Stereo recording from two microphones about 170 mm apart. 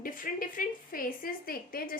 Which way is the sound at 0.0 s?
55° left (ahead or behind).